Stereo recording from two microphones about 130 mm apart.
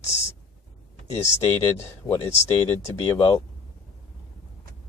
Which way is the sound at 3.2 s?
25° left (ahead or behind).